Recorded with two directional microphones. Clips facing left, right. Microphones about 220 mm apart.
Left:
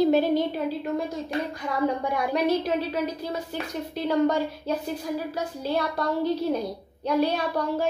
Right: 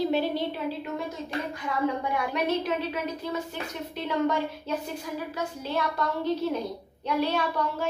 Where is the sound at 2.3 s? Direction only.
35° left (ahead or behind).